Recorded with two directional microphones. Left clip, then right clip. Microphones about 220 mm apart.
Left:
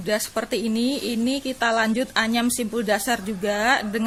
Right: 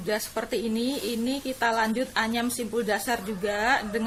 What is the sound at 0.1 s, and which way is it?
Speech, 45° left (ahead or behind).